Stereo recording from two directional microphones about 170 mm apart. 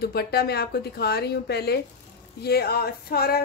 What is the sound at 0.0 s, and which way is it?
Speech, 65° left (ahead or behind).